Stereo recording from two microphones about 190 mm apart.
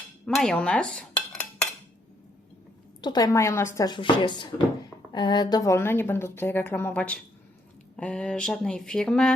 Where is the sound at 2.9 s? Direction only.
20° left (ahead or behind); by 9.3 s 5° left (ahead or behind).